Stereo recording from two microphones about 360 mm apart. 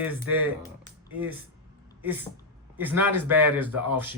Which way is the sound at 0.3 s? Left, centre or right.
Right.